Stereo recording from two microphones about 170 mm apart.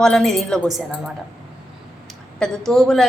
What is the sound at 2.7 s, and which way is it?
Speech, centre (ahead or behind).